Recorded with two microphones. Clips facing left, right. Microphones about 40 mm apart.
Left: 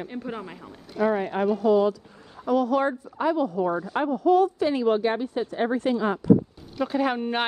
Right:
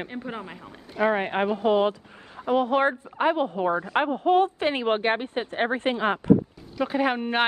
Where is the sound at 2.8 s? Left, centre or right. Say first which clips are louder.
Right 2 dB; right.